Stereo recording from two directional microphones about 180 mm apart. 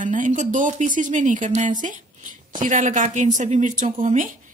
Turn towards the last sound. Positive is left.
turn(degrees=-45)  # may be behind; listen again after turning